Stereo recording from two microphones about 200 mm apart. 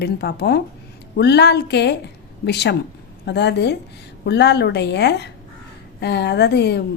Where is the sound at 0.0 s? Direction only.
55° left (ahead or behind).